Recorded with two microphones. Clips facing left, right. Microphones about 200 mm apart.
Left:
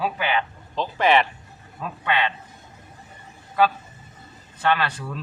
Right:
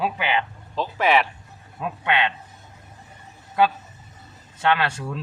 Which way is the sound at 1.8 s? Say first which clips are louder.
Right 1 dB; 20° right (ahead or behind).